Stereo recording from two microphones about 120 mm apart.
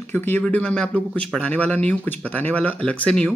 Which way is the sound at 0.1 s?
15° left (ahead or behind).